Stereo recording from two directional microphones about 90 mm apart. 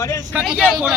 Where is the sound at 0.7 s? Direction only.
Centre (ahead or behind).